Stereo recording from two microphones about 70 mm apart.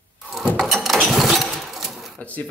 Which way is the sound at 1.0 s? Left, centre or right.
Centre.